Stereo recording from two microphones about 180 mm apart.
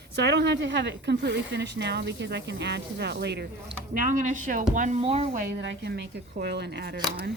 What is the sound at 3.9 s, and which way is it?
Speech, 45° right (ahead or behind).